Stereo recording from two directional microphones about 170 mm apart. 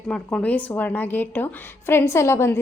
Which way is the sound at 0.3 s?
10° left (ahead or behind).